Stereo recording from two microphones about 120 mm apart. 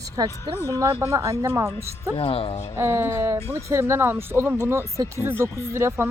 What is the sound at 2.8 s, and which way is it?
Speech, 20° right (ahead or behind).